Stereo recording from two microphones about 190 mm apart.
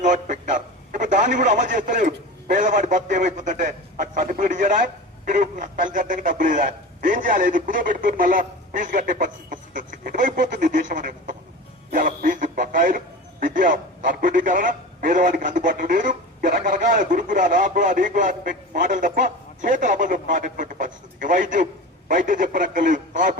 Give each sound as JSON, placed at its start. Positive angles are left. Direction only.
{"t": 0.0, "sound": "a man's voice", "side_deg": -40}